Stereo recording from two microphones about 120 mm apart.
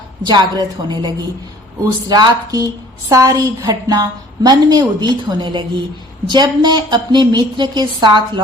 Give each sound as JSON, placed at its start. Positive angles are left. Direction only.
{"t": 0.3, "sound": "a woman's voice", "side_deg": -35}